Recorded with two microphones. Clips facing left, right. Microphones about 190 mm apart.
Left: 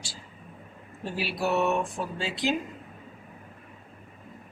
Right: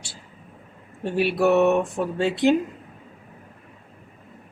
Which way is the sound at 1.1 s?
55° right (ahead or behind).